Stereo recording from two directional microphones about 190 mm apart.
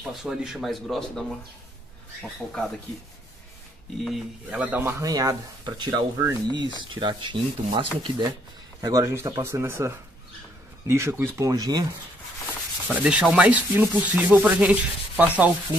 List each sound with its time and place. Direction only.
0.0 s speech: 5° right (ahead or behind)
4.0 s speech: 5° right (ahead or behind)
12.8 s speech: 5° right (ahead or behind)